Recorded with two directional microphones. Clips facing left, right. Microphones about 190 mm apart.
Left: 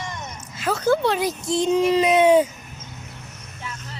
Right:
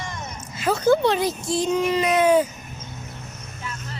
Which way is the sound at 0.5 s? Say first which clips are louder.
Right 2 dB; centre (ahead or behind).